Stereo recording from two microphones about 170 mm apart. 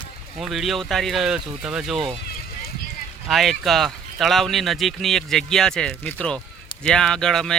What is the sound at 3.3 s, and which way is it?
Speech, centre (ahead or behind).